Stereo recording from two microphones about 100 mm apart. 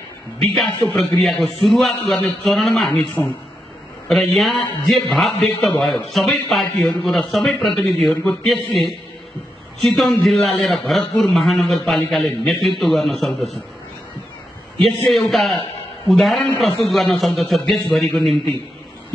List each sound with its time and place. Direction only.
0.4 s a man's voice: centre (ahead or behind)
4.1 s a man's voice: centre (ahead or behind)
15.0 s a man's voice: centre (ahead or behind)